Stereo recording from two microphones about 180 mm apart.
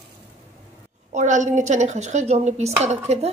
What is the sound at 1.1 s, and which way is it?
Speech, 40° right (ahead or behind).